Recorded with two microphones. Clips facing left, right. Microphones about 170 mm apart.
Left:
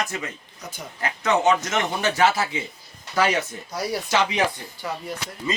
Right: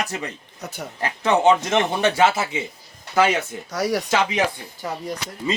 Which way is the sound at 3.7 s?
90° right.